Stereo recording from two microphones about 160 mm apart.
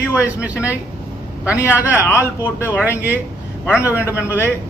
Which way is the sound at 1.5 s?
15° left (ahead or behind).